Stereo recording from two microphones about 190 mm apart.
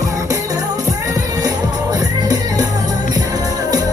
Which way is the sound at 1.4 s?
20° right (ahead or behind).